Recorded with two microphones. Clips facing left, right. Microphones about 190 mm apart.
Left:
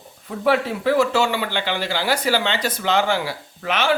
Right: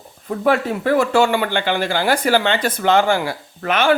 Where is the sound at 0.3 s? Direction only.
45° right (ahead or behind).